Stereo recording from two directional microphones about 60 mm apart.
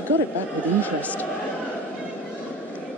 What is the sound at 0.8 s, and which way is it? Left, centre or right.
Speech, left.